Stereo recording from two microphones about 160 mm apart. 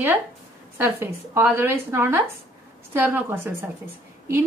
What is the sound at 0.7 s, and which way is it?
A woman's voice, 15° right (ahead or behind).